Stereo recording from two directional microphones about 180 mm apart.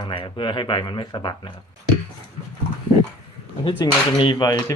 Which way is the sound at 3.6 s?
25° left (ahead or behind).